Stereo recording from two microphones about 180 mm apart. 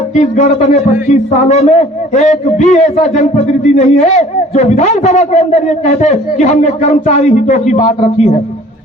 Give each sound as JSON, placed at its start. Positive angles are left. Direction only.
{"t": 0.2, "sound": "a man's voice", "side_deg": 40}